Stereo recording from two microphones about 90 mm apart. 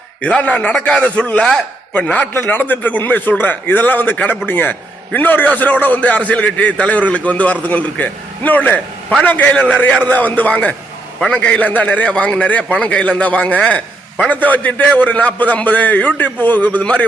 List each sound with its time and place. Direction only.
0.2 s a man's voice: 15° left (ahead or behind)